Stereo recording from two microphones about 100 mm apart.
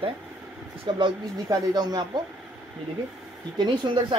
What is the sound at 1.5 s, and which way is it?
Speech, 45° right (ahead or behind).